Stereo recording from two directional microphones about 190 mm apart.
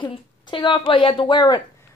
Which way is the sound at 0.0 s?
25° left (ahead or behind).